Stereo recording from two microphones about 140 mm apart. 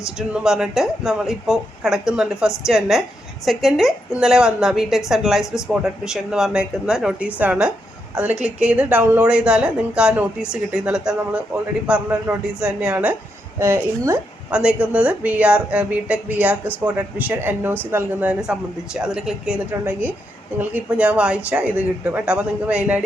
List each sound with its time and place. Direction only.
0.2 s a woman's voice: 5° right (ahead or behind); by 14.2 s 20° right (ahead or behind)
14.5 s speech: 10° right (ahead or behind)